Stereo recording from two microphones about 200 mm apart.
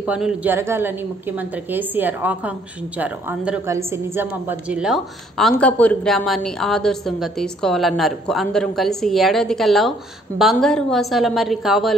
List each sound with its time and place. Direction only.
0.0 s a woman's voice: 5° right (ahead or behind)